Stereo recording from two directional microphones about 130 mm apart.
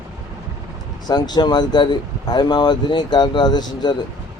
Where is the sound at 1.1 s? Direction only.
35° left (ahead or behind).